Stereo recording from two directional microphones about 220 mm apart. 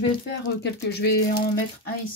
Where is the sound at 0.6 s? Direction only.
50° left (ahead or behind).